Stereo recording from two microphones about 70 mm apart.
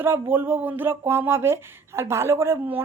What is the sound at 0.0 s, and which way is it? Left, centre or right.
A woman's voice, right.